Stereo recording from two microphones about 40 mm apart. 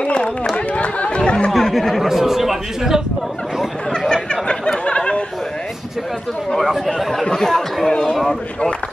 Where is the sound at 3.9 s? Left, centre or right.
Centre.